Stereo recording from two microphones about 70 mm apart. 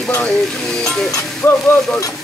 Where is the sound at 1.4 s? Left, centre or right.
Left.